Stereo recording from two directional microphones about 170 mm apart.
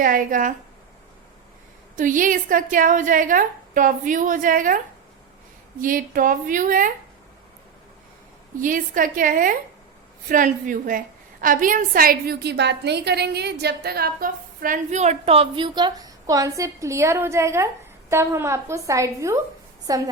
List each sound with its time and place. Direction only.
0.0 s a woman's voice: 55° right (ahead or behind)
2.0 s a woman's voice: 50° right (ahead or behind)
5.8 s a woman's voice: 55° right (ahead or behind)
8.5 s a woman's voice: 50° right (ahead or behind); by 20.0 s 20° right (ahead or behind)